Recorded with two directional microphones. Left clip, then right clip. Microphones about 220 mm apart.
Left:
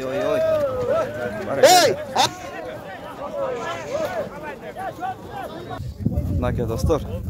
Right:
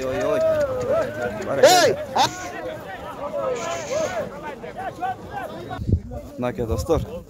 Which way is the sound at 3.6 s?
55° right (ahead or behind).